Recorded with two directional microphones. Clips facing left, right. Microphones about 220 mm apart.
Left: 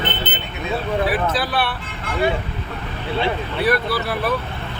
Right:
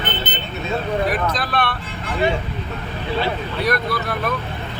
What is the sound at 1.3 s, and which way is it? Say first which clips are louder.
Speech: left 1 dB; 5° left (ahead or behind).